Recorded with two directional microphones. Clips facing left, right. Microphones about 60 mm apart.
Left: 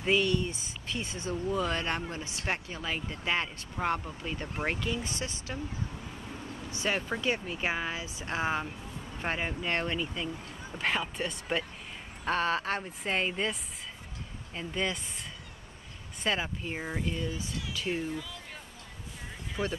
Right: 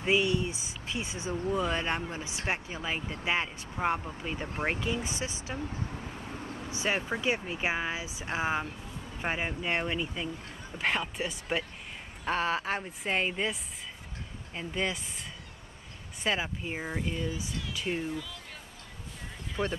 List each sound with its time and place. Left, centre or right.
0.0 s speech: centre
6.7 s speech: centre
16.3 s speech: centre
19.6 s speech: centre